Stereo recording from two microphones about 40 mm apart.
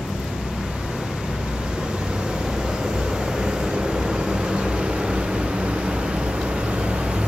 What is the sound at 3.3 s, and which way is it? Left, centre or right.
Vehicle, centre.